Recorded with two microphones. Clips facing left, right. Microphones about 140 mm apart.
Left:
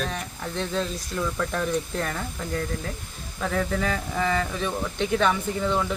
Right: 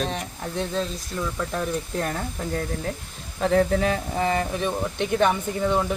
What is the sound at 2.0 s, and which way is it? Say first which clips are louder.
Speech: right 2 dB; 35° right (ahead or behind).